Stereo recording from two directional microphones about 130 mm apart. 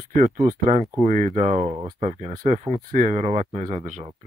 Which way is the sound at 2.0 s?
60° right (ahead or behind).